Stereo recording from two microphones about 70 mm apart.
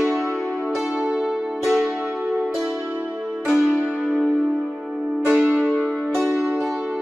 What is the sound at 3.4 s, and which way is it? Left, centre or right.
Music, centre.